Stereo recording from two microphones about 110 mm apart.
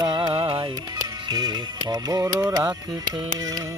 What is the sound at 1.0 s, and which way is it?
Speech, 40° right (ahead or behind).